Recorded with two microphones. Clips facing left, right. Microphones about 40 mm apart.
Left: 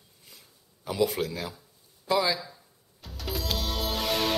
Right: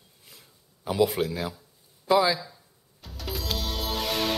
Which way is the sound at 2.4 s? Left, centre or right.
Centre.